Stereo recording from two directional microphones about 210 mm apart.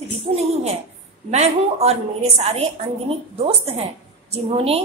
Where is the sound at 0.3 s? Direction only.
30° right (ahead or behind).